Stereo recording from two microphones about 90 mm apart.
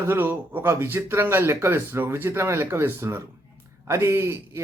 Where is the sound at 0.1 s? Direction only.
25° right (ahead or behind).